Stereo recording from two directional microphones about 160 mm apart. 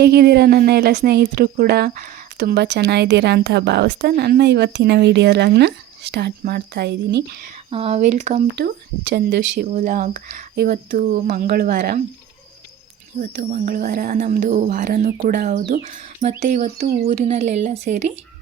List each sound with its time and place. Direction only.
0.0 s speech: 90° right
7.7 s speech: 40° right (ahead or behind)
8.5 s speech: 85° right
9.7 s speech: 60° right (ahead or behind)
10.5 s speech: 70° right (ahead or behind)
13.3 s speech: 65° right (ahead or behind)
15.7 s speech: 55° right (ahead or behind)